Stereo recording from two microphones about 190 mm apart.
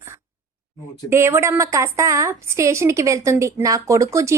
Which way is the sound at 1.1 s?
15° right (ahead or behind).